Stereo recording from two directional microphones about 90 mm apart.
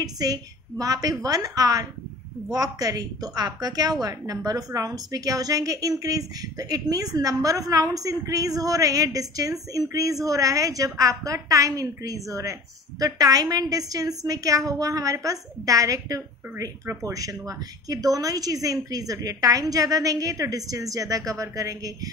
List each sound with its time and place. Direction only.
0.0 s a woman's voice: 45° right (ahead or behind)